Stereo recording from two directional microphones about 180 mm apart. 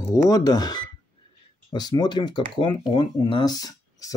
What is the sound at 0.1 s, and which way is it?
Speech, 20° left (ahead or behind).